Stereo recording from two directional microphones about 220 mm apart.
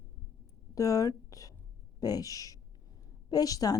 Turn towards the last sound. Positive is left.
turn(degrees=15)  # may be behind; listen again after turning